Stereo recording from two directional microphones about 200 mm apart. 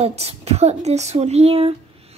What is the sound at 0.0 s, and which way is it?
Dishes, 30° right (ahead or behind).